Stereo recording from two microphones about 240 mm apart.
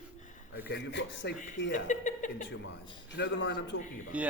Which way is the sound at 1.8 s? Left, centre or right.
Left.